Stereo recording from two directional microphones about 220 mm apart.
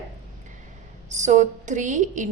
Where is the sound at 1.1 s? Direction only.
30° right (ahead or behind).